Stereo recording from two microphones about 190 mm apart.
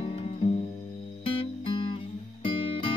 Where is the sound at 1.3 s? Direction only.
25° left (ahead or behind).